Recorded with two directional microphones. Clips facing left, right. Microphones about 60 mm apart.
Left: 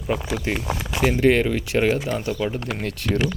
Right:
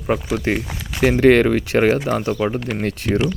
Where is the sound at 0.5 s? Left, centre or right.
Right.